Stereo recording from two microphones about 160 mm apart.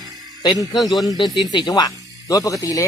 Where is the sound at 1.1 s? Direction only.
30° left (ahead or behind).